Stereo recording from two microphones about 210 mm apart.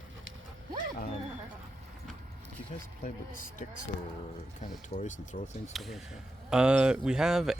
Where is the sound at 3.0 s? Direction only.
40° left (ahead or behind).